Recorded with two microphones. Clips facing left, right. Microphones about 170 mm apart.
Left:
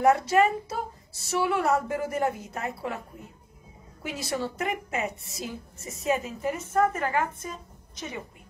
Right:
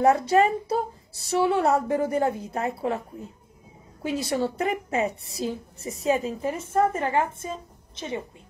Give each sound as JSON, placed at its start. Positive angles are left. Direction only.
{"t": 0.1, "sound": "a woman's voice", "side_deg": -30}
{"t": 4.0, "sound": "a woman's voice", "side_deg": -30}